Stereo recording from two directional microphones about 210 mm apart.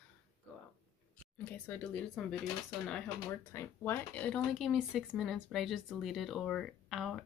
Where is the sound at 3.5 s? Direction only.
10° left (ahead or behind).